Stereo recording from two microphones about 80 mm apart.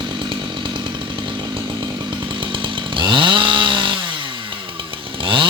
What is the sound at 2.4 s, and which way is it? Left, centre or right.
Chainsaw, right.